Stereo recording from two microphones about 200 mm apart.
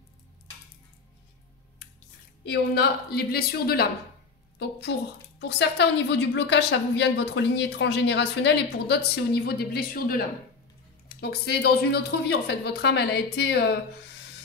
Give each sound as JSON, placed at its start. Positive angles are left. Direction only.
{"t": 2.4, "sound": "a woman's voice", "side_deg": 55}